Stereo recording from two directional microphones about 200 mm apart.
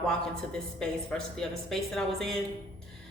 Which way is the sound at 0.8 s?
5° left (ahead or behind).